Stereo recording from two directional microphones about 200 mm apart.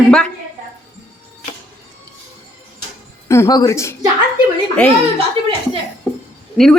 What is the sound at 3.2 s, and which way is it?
Speech, 15° left (ahead or behind).